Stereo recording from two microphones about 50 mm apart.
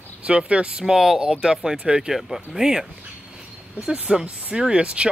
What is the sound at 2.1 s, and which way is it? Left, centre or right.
Speech, centre.